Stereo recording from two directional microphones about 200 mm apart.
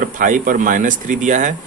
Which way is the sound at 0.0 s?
45° right (ahead or behind).